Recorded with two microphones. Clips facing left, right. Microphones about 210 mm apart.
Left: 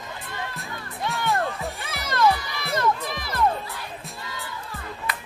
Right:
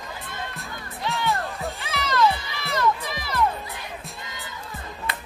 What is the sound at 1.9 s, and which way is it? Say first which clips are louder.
Music: right 2 dB; 50° left (ahead or behind).